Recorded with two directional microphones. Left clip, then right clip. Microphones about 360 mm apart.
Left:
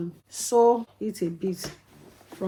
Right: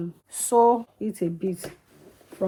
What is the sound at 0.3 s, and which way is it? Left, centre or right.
Speech, centre.